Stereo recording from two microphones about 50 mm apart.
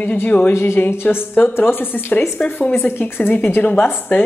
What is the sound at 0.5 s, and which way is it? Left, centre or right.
A woman's voice, left.